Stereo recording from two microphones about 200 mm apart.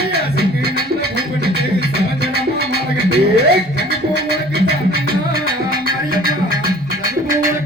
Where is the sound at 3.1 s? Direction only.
55° right (ahead or behind).